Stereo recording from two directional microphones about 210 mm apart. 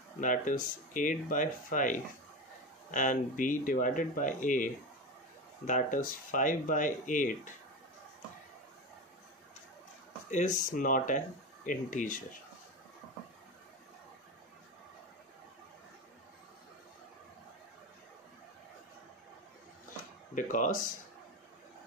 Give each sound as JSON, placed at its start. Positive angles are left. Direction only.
{"t": 0.2, "sound": "speech", "side_deg": 40}
{"t": 5.7, "sound": "speech", "side_deg": 40}
{"t": 10.3, "sound": "speech", "side_deg": 35}
{"t": 20.3, "sound": "speech", "side_deg": 40}